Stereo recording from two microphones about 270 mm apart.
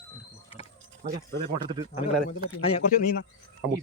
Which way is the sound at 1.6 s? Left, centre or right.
Centre.